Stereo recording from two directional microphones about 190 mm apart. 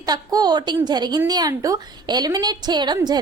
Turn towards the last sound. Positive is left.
turn(degrees=-20)  # may be behind; listen again after turning